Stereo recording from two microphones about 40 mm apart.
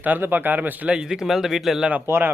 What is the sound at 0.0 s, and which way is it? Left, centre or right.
Speech, right.